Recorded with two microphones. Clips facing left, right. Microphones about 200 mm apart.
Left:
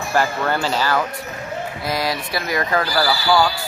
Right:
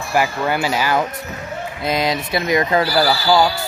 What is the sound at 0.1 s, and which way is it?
Speech, 10° right (ahead or behind).